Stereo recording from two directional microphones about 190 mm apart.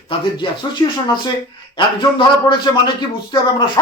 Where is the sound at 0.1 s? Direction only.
25° left (ahead or behind).